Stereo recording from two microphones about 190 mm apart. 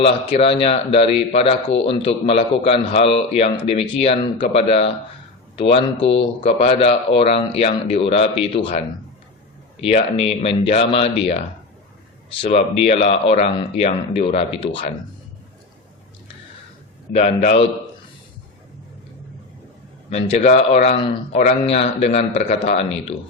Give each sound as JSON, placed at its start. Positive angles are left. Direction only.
{"t": 0.0, "sound": "speech", "side_deg": 30}
{"t": 9.8, "sound": "speech", "side_deg": 30}
{"t": 17.1, "sound": "speech", "side_deg": 35}
{"t": 20.1, "sound": "speech", "side_deg": 35}